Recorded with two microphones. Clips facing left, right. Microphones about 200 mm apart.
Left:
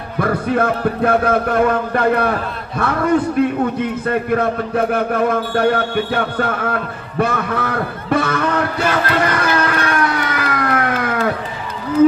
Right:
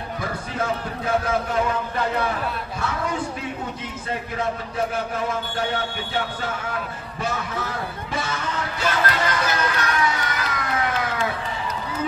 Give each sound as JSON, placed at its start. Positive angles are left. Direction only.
{"t": 0.2, "sound": "a man's voice", "side_deg": 60}